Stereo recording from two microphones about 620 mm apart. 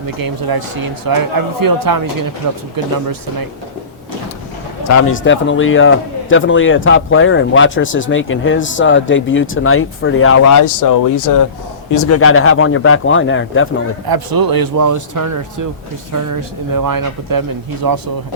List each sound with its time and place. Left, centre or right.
0.2 s a man's voice: right
4.8 s a man's voice: left
14.1 s a man's voice: right